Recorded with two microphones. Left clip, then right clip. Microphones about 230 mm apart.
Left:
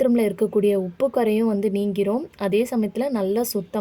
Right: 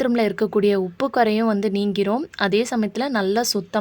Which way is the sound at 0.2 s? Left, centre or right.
Right.